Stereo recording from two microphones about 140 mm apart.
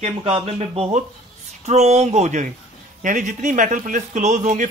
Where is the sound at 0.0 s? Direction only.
45° right (ahead or behind).